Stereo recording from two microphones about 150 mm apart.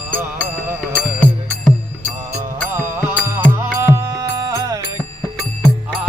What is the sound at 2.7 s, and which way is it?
Music, 15° right (ahead or behind).